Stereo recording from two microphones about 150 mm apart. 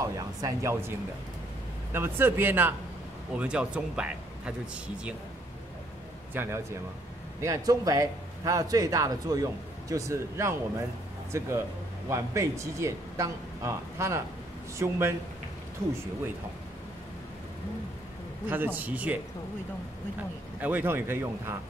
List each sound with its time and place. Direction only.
0.0 s a sound: 20° right (ahead or behind)
1.9 s speech: 15° right (ahead or behind)
6.3 s a man's voice: 15° right (ahead or behind)
18.5 s speech: 15° right (ahead or behind)
20.6 s speech: 15° right (ahead or behind)